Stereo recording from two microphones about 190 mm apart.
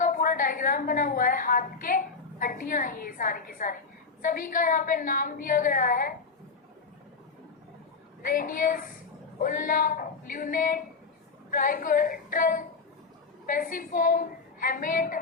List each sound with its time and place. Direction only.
0.0 s a woman's voice: 45° left (ahead or behind)
8.2 s a woman's voice: 45° left (ahead or behind)